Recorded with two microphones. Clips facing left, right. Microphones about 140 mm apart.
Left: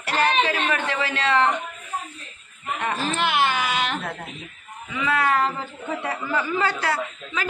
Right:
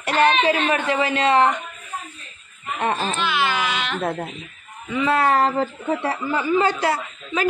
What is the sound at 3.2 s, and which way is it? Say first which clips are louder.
Baby cry: left 3 dB; 55° left (ahead or behind).